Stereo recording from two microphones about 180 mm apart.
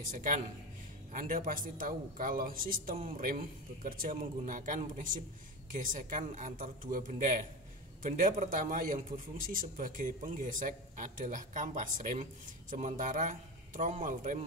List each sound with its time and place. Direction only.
1.1 s a man's voice: 50° right (ahead or behind)